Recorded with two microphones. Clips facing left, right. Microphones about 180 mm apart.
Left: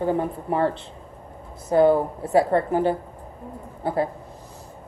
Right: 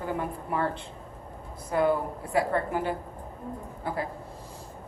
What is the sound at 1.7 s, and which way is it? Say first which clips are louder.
A woman's voice: left 8 dB; 35° left (ahead or behind).